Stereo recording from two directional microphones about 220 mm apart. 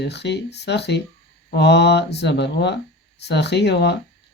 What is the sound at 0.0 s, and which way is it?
Speech, 50° left (ahead or behind).